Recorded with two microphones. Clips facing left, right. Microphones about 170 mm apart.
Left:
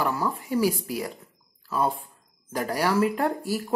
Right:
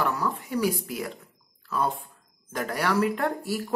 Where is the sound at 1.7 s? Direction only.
5° left (ahead or behind).